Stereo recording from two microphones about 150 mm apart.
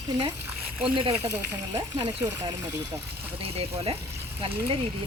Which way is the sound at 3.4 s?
40° right (ahead or behind).